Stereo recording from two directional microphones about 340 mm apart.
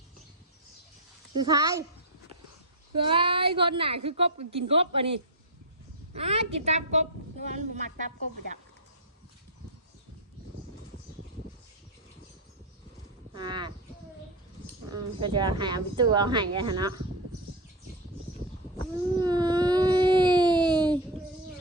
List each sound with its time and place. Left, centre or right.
1.3 s speech: centre
2.9 s speech: centre
13.3 s speech: centre
14.8 s speech: centre
19.1 s a sound: centre